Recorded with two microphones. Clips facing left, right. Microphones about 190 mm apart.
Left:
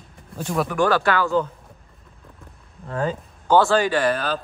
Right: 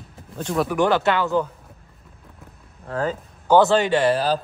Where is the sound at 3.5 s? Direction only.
20° right (ahead or behind).